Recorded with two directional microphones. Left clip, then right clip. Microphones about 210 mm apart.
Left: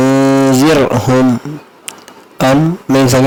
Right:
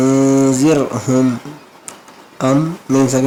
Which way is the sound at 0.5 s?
35° left (ahead or behind).